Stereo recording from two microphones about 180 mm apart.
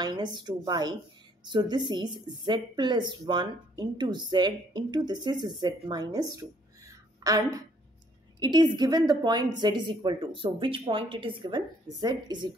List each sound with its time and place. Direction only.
0.0 s speech: 25° right (ahead or behind)
7.2 s a sound: 20° right (ahead or behind)
8.4 s speech: 25° right (ahead or behind)